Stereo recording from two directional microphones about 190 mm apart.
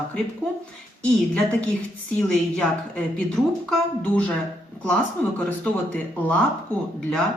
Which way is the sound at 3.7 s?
5° left (ahead or behind).